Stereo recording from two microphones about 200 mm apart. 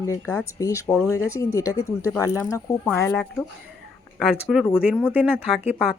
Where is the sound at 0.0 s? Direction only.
15° left (ahead or behind).